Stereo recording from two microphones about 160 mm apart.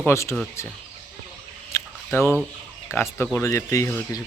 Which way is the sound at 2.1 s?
15° left (ahead or behind).